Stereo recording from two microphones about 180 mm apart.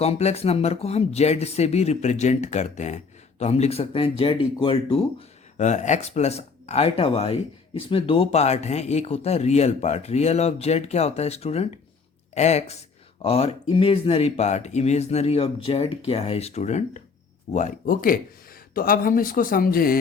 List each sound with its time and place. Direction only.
0.0 s speech: 35° left (ahead or behind)
5.5 s speech: 40° left (ahead or behind)